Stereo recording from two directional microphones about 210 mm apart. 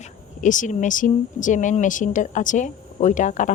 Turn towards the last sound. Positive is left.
turn(degrees=35)  # may be behind; listen again after turning